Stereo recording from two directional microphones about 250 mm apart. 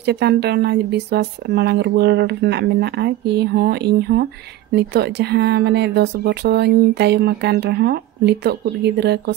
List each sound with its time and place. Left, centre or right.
0.0 s speech: right